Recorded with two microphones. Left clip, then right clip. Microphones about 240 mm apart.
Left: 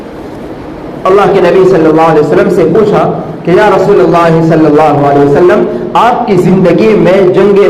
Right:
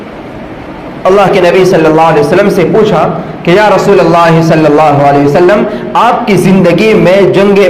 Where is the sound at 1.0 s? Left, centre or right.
Right.